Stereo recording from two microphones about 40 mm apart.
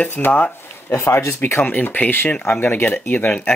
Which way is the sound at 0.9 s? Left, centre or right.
Left.